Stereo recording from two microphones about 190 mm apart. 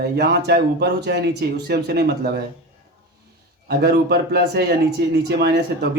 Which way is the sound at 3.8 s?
55° right (ahead or behind).